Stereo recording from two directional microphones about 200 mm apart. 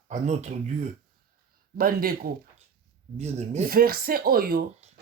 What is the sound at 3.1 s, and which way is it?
Speech, 35° right (ahead or behind).